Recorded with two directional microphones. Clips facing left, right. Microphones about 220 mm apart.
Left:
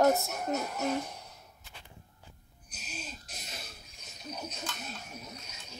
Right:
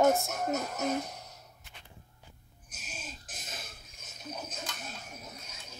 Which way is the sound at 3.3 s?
50° right (ahead or behind).